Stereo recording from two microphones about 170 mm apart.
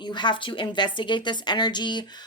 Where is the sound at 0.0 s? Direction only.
25° left (ahead or behind).